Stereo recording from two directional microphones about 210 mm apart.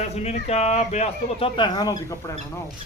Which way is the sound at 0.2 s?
30° left (ahead or behind).